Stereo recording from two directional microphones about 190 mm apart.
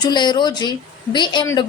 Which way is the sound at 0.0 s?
25° left (ahead or behind).